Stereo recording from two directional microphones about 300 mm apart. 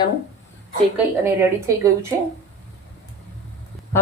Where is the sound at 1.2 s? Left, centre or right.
Centre.